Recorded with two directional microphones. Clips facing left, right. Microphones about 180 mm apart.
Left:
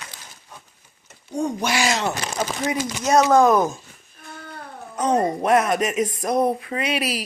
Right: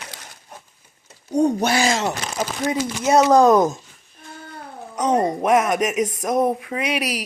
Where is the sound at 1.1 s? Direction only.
40° right (ahead or behind).